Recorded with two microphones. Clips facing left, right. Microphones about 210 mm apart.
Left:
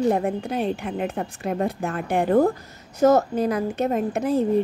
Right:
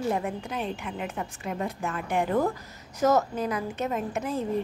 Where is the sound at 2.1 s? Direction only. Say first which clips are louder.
Left 7 dB; 35° left (ahead or behind).